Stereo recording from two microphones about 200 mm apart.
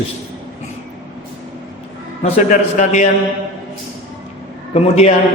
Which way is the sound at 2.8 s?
35° left (ahead or behind).